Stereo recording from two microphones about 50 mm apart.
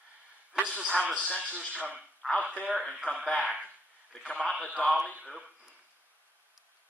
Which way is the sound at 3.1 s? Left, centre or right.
Left.